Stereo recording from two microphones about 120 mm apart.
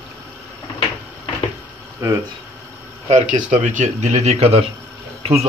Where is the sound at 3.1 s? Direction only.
80° right.